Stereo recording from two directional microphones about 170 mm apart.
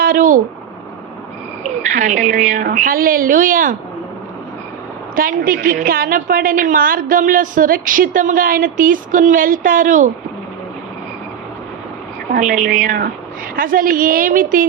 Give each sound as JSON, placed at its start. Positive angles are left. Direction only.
{"t": 0.0, "sound": "a sound", "side_deg": -55}
{"t": 1.9, "sound": "a woman's voice", "side_deg": -45}
{"t": 5.1, "sound": "a woman's voice", "side_deg": -55}
{"t": 12.3, "sound": "a woman's voice", "side_deg": -50}